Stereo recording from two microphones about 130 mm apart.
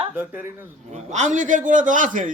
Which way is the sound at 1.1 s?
70° right (ahead or behind).